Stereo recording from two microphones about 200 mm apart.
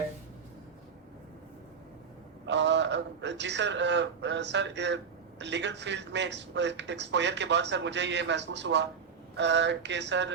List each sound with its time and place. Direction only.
2.5 s a man's voice: 60° right (ahead or behind)